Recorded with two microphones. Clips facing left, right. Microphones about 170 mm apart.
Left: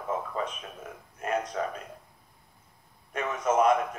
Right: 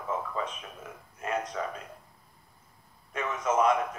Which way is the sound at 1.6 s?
40° left (ahead or behind).